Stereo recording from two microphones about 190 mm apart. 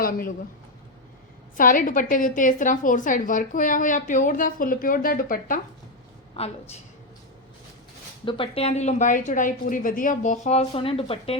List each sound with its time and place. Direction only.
0.0 s speech: 50° left (ahead or behind)
1.5 s a woman's voice: 45° left (ahead or behind)
6.4 s a woman's voice: 30° left (ahead or behind)
8.2 s a woman's voice: 25° left (ahead or behind)